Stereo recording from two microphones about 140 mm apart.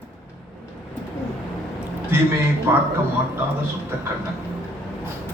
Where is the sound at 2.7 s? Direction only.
15° right (ahead or behind).